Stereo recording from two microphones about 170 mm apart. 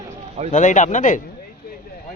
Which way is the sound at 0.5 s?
45° left (ahead or behind).